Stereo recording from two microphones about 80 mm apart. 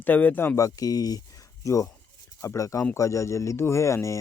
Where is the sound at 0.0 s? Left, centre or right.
Left.